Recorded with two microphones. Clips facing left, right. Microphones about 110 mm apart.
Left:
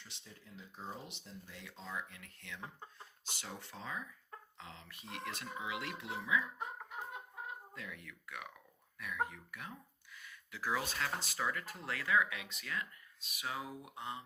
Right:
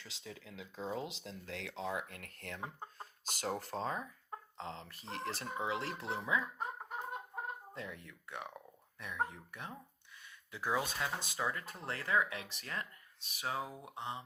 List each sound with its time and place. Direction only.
0.1 s speech: 90° right; by 6.7 s 35° right (ahead or behind)
7.7 s speech: 30° right (ahead or behind)